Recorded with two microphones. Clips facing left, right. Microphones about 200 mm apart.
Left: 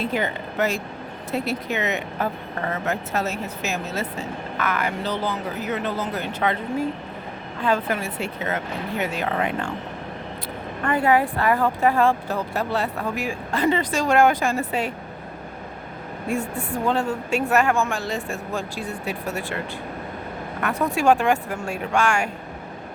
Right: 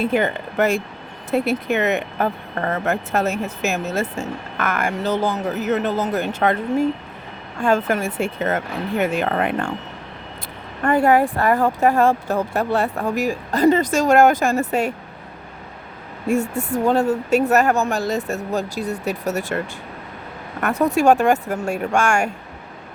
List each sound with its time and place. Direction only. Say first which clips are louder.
0.0 s speech: right 5 dB; 55° right (ahead or behind)
7.6 s speech: right 4 dB; 45° right (ahead or behind)
10.8 s speech: right 4 dB; 45° right (ahead or behind)
16.6 s speech: right 5 dB; 45° right (ahead or behind)